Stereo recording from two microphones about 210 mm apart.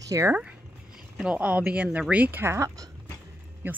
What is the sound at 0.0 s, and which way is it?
Speech, 15° right (ahead or behind).